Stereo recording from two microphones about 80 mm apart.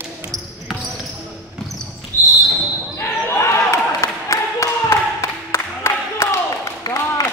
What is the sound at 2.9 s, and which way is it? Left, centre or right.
Basketball bounce, left.